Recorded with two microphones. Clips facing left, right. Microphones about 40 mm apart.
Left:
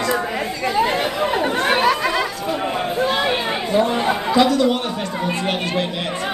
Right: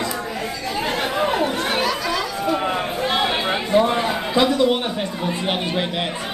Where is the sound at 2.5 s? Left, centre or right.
Centre.